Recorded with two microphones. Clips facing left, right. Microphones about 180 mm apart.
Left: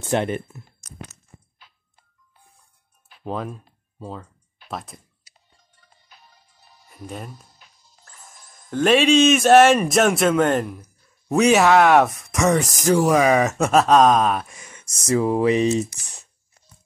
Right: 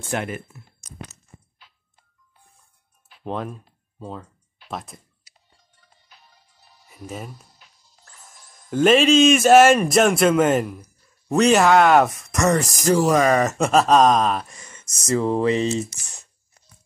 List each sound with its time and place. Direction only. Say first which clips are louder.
0.0 s speech: left 5 dB; 25° left (ahead or behind)
3.3 s a man's voice: even; centre (ahead or behind)
6.0 s music: left 2 dB; 45° left (ahead or behind)
6.9 s speech: even; 5° right (ahead or behind)
7.5 s music: left 1 dB; 50° left (ahead or behind)
8.6 s a man's voice: right 1 dB; 5° right (ahead or behind); by 15.9 s 15° left (ahead or behind)